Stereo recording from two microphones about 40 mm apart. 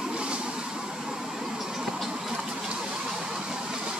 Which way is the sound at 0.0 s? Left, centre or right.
Right.